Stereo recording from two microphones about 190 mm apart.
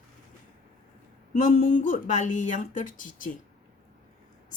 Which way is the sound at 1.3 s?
45° left (ahead or behind).